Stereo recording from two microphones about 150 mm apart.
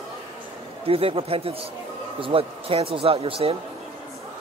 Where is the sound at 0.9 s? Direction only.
40° right (ahead or behind).